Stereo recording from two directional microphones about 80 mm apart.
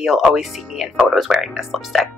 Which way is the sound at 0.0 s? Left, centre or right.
Centre.